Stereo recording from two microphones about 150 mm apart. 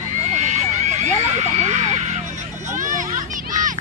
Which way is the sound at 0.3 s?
50° right (ahead or behind).